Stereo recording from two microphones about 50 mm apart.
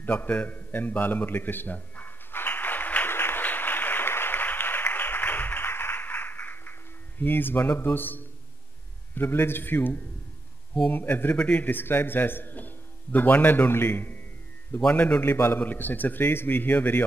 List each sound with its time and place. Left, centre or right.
0.0 s a sound: left
3.1 s applause: left
9.1 s a man's voice: left
11.3 s a man's voice: left
11.6 s a man's voice: left
14.9 s a man's voice: left
15.3 s a man's voice: left
15.6 s a man's voice: left